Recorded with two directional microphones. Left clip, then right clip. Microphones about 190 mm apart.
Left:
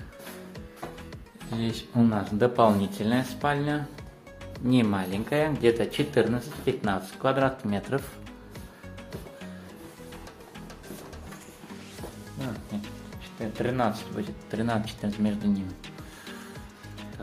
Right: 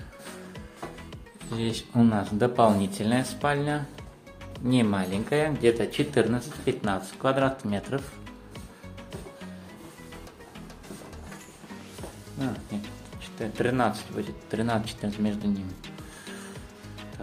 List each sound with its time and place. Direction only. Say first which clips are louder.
1.6 s speech: right 1 dB; 10° right (ahead or behind)
13.4 s music: right 2 dB; 15° right (ahead or behind)
14.1 s speech: right 2 dB; 5° right (ahead or behind)